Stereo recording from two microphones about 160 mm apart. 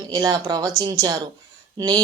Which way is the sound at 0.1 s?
25° right (ahead or behind).